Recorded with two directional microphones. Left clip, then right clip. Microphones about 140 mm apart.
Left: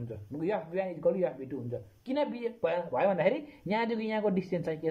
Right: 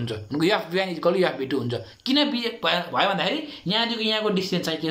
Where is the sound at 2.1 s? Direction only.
45° left (ahead or behind).